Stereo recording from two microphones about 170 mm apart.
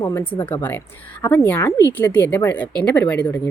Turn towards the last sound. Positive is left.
turn(degrees=5)  # may be behind; listen again after turning